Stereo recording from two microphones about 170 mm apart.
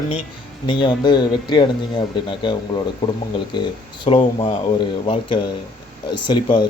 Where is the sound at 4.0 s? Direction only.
30° left (ahead or behind).